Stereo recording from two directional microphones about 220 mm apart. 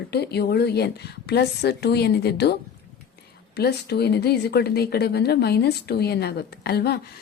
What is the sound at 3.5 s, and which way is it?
Speech, 45° left (ahead or behind).